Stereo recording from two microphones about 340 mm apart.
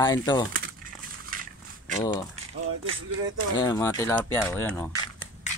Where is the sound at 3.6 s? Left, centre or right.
Centre.